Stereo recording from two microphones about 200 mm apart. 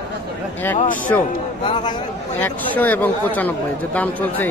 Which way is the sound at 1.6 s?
20° left (ahead or behind).